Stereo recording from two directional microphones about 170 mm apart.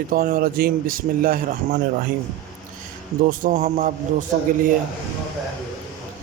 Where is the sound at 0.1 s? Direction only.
60° right (ahead or behind).